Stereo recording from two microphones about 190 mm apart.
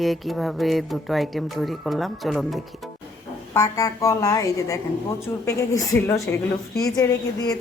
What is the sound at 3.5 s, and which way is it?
A woman's voice, 15° left (ahead or behind).